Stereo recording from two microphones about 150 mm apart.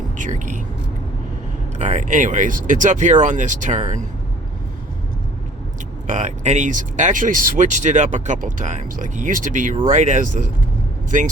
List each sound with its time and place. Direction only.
0.2 s speech: 55° right (ahead or behind)
1.8 s speech: 55° right (ahead or behind)
6.1 s speech: 50° right (ahead or behind)